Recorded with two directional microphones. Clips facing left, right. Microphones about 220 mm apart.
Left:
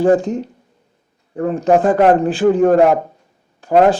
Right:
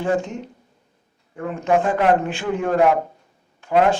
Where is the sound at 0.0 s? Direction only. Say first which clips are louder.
Left 9 dB; 35° left (ahead or behind).